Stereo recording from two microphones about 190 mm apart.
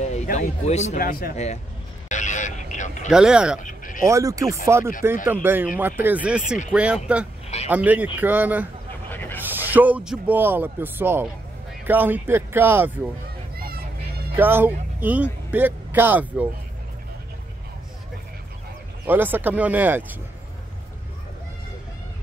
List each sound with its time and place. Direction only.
0.0 s a sound: 40° left (ahead or behind)
0.9 s speech: 50° left (ahead or behind)
1.3 s speech: 35° left (ahead or behind)
2.0 s vehicle: 40° left (ahead or behind)
3.1 s speech: 5° right (ahead or behind)
3.6 s a sound: 45° left (ahead or behind)
4.0 s speech: 15° right (ahead or behind)
9.1 s a sound: 10° left (ahead or behind)
9.5 s speech: 10° right (ahead or behind)
13.6 s a sound: 55° right (ahead or behind)
14.3 s speech: 10° right (ahead or behind)
19.0 s speech: 10° right (ahead or behind)